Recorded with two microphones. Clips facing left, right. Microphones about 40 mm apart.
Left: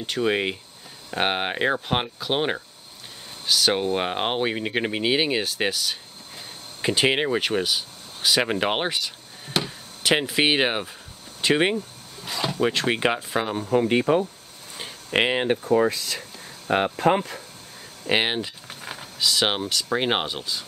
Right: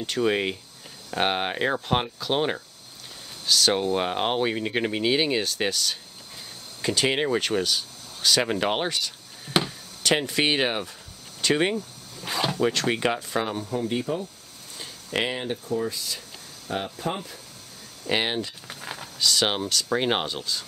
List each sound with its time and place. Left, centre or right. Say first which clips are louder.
0.0 s speech: left 1 dB; centre
6.8 s speech: left 2 dB; left
10.0 s speech: left 2 dB; centre
11.4 s a sound: left 2 dB; left
12.5 s speech: left 4 dB; left
13.6 s speech: left 7 dB; left
14.8 s speech: left 5 dB; left
15.7 s speech: left 7 dB; left
16.2 s speech: left 4 dB; left
18.0 s speech: left 3 dB; left